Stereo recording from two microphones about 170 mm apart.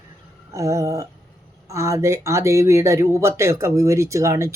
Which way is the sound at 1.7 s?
15° right (ahead or behind).